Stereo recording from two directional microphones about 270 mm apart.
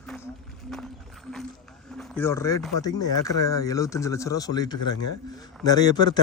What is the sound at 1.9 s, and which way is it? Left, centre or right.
A man's voice, centre.